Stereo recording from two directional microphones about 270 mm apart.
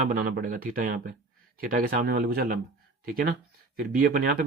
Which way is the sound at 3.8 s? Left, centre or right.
Right.